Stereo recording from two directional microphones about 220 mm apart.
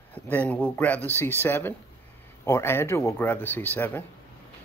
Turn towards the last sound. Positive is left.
turn(degrees=10)  # may be behind; listen again after turning